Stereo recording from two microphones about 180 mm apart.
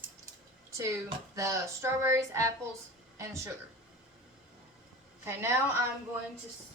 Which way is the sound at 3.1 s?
15° right (ahead or behind).